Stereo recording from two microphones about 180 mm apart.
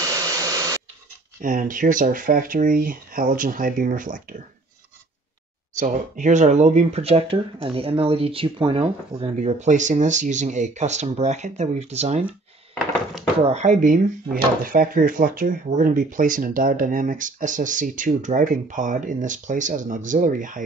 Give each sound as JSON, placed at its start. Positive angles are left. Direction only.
{"t": 1.4, "sound": "speech", "side_deg": -45}
{"t": 5.8, "sound": "speech", "side_deg": -40}
{"t": 13.5, "sound": "speech", "side_deg": -40}